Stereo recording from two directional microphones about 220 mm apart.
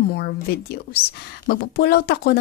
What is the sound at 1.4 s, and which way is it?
Speech, 45° left (ahead or behind).